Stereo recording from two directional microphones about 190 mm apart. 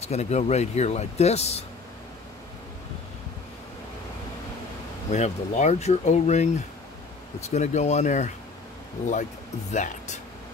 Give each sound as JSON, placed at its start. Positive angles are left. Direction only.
{"t": 0.0, "sound": "speech", "side_deg": 35}
{"t": 5.1, "sound": "speech", "side_deg": 35}
{"t": 9.7, "sound": "speech", "side_deg": 40}